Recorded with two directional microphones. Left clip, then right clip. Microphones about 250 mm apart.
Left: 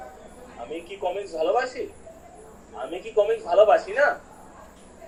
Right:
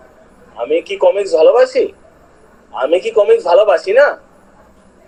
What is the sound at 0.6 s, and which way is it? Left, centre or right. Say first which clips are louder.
Speech: right 18 dB; right.